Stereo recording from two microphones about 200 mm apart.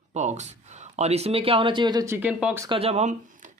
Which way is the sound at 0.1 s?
35° right (ahead or behind).